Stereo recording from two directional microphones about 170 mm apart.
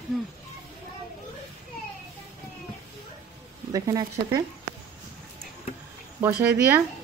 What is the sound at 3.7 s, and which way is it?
Speech, 20° right (ahead or behind).